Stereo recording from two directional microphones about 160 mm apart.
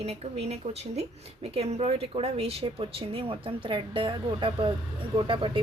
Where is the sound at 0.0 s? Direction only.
40° right (ahead or behind).